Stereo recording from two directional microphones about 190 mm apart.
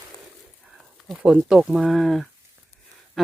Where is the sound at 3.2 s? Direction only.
Centre (ahead or behind).